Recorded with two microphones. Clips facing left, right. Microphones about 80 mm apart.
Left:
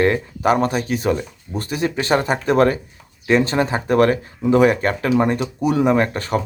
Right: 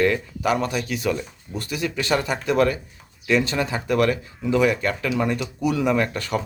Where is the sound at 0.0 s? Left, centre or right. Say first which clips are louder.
Left 4 dB; left.